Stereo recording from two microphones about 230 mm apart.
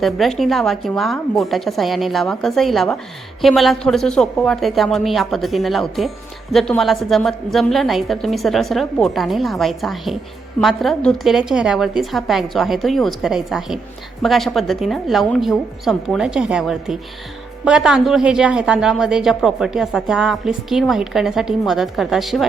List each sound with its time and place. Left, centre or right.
0.0 s a woman's voice: centre